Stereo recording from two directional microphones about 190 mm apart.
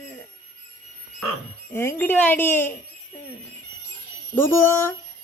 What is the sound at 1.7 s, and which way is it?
Speech, 10° left (ahead or behind).